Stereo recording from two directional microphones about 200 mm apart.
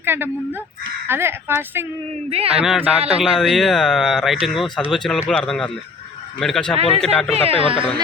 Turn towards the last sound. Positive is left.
turn(degrees=-30)  # may be behind; listen again after turning